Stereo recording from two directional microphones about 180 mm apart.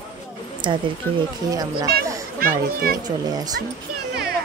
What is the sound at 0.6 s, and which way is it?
Speech, 25° right (ahead or behind).